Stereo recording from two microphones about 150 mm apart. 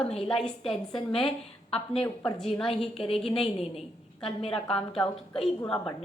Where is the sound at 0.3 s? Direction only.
Centre (ahead or behind).